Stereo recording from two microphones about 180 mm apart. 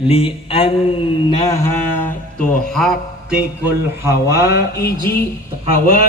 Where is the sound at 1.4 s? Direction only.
15° left (ahead or behind).